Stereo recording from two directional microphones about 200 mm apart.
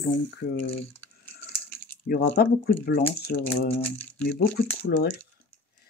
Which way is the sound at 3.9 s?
5° left (ahead or behind).